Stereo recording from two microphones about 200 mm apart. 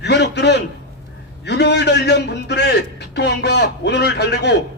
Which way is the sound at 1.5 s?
60° left (ahead or behind).